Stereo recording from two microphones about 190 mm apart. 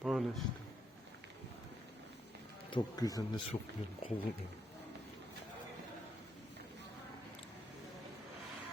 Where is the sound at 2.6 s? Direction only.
25° left (ahead or behind).